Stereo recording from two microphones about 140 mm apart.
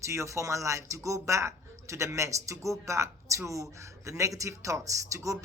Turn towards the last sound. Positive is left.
turn(degrees=-20)  # may be behind; listen again after turning